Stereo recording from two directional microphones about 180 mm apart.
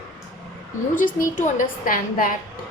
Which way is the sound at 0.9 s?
45° left (ahead or behind).